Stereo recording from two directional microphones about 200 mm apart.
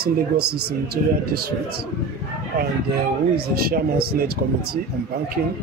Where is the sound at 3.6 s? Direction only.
50° right (ahead or behind).